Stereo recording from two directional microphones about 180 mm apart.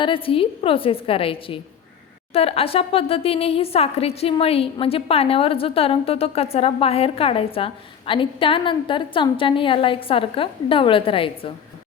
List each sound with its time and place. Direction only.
0.0 s a woman's voice: 30° left (ahead or behind)